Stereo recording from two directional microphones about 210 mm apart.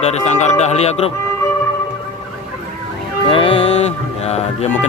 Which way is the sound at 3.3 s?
25° left (ahead or behind).